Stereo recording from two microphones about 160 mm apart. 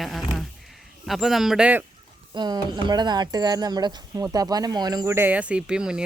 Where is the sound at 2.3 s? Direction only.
25° right (ahead or behind).